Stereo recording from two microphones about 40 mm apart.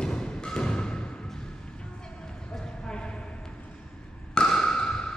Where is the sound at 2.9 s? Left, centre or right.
Left.